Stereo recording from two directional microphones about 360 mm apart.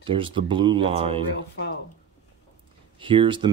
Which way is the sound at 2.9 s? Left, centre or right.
Centre.